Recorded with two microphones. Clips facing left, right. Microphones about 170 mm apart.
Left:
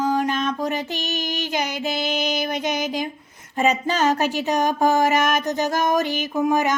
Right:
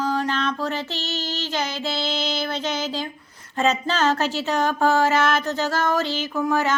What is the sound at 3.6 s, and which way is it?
Female singing, 15° left (ahead or behind).